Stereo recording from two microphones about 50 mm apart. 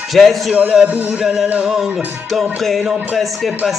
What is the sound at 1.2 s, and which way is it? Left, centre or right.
Music, centre.